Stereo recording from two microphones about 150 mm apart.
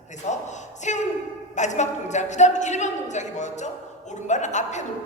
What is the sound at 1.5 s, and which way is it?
A woman's voice, 50° left (ahead or behind).